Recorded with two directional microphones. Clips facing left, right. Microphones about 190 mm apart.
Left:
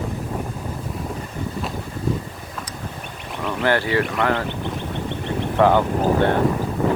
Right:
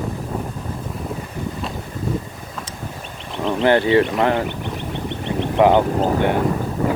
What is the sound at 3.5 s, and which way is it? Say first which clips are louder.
Speech: right 5 dB; 25° right (ahead or behind).